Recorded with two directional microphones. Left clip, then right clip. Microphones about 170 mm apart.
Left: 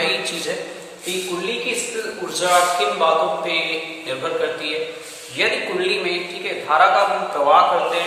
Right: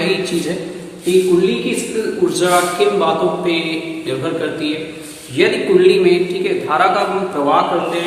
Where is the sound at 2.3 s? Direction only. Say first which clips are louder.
Left 1 dB; 15° right (ahead or behind).